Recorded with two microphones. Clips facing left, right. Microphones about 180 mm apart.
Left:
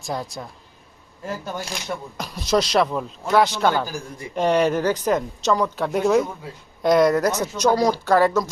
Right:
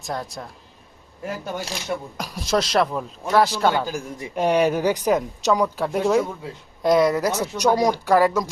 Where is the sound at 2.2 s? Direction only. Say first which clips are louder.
Left 3 dB; 5° right (ahead or behind).